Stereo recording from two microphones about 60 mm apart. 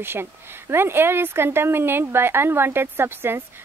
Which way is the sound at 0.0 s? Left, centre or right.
Right.